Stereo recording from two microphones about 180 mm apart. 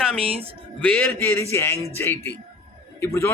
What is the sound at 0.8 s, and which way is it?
A man's voice, 10° left (ahead or behind).